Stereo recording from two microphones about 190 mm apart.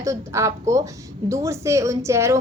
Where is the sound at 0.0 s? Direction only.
15° right (ahead or behind).